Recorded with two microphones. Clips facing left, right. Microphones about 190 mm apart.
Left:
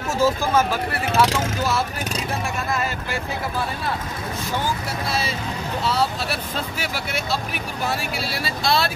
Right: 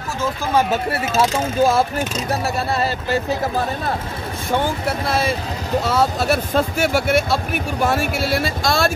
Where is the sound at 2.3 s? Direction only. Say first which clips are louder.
Right 5 dB; 40° right (ahead or behind).